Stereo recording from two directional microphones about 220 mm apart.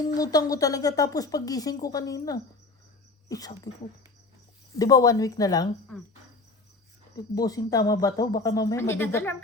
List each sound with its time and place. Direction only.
0.0 s speech: 15° left (ahead or behind)
4.8 s speech: 15° left (ahead or behind)
7.3 s speech: 15° left (ahead or behind)